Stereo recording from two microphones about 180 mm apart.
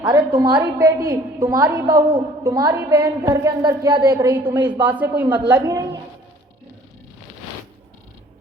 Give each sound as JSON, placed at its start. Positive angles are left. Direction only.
{"t": 0.3, "sound": "a woman's voice", "side_deg": -25}
{"t": 0.6, "sound": "a woman's voice", "side_deg": -15}
{"t": 4.2, "sound": "a woman's voice", "side_deg": -10}
{"t": 5.5, "sound": "a woman's voice", "side_deg": -20}